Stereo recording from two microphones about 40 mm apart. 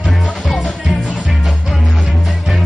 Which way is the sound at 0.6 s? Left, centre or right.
Centre.